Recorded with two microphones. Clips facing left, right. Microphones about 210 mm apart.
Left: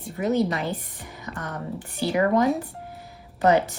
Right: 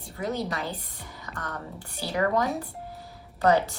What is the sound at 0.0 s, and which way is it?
Speech, 20° left (ahead or behind).